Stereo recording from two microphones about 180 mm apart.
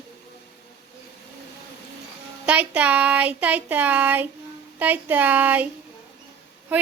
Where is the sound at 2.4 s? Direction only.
10° right (ahead or behind).